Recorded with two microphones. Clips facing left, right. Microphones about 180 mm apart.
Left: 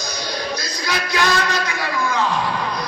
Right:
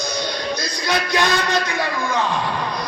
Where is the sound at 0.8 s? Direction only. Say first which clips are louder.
Right 2 dB; 20° right (ahead or behind).